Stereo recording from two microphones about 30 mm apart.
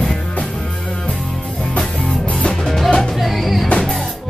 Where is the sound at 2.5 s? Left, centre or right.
Centre.